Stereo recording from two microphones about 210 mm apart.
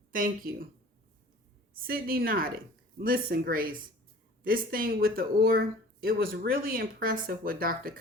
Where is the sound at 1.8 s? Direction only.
45° right (ahead or behind).